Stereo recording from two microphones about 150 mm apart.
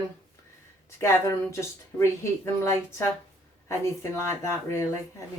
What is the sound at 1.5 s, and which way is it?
Speech, 15° left (ahead or behind).